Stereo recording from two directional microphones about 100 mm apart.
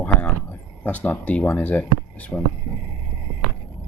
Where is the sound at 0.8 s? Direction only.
20° left (ahead or behind).